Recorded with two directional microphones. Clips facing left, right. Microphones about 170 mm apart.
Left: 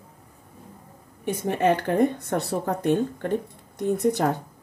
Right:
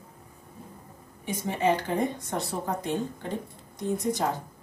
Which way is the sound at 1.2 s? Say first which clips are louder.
Left 4 dB; 60° left (ahead or behind).